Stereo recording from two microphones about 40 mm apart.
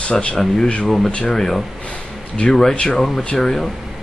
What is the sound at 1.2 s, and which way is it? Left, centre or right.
Speech, centre.